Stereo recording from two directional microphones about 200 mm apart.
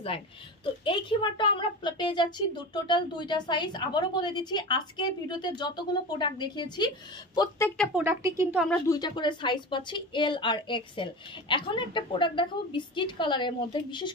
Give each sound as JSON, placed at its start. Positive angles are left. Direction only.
{"t": 0.8, "sound": "speech", "side_deg": 25}
{"t": 7.7, "sound": "speech", "side_deg": 5}
{"t": 8.0, "sound": "speech", "side_deg": -15}
{"t": 8.8, "sound": "speech", "side_deg": 20}